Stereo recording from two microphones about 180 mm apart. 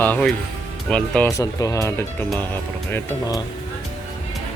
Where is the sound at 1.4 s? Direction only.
20° left (ahead or behind).